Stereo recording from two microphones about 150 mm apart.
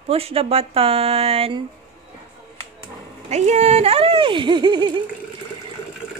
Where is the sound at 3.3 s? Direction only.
50° right (ahead or behind); by 4.9 s 30° right (ahead or behind).